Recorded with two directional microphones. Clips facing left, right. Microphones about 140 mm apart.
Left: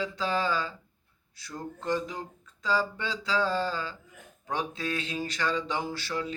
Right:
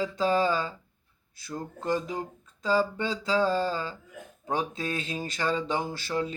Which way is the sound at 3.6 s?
45° right (ahead or behind).